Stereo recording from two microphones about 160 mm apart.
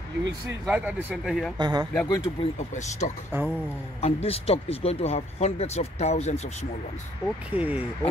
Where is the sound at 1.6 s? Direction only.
25° right (ahead or behind).